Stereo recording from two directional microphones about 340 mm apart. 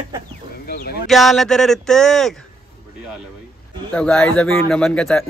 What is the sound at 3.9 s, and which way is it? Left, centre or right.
Speech, centre.